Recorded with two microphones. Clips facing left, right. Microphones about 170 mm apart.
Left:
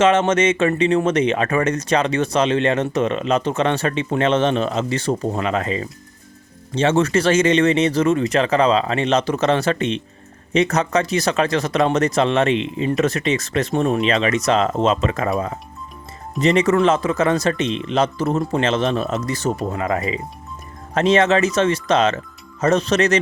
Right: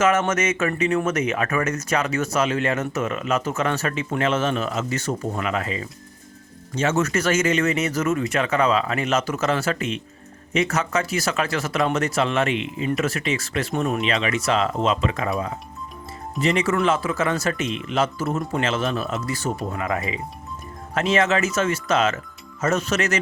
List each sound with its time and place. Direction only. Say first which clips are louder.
0.0 s speech: left 5 dB; 30° left (ahead or behind)
19.7 s speech: left 4 dB; 25° left (ahead or behind)